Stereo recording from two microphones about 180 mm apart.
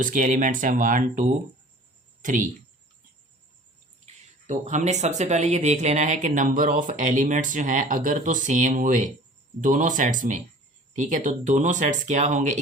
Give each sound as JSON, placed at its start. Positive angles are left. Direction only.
{"t": 0.0, "sound": "speech", "side_deg": -45}
{"t": 4.0, "sound": "speech", "side_deg": -40}